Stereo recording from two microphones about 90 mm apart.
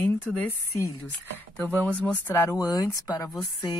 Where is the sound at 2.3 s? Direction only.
30° left (ahead or behind).